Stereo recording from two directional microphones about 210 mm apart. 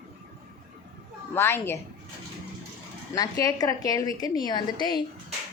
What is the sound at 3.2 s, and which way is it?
A woman's voice, 15° left (ahead or behind).